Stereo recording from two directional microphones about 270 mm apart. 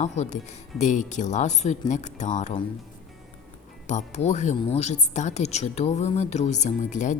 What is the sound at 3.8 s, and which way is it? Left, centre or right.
Speech, left.